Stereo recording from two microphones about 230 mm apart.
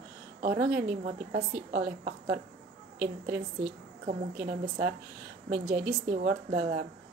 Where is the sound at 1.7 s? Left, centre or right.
Right.